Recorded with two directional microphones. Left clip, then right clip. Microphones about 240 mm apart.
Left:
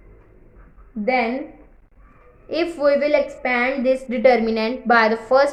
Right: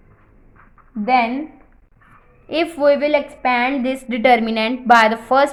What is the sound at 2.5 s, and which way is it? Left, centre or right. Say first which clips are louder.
A woman's voice: right 3 dB; right.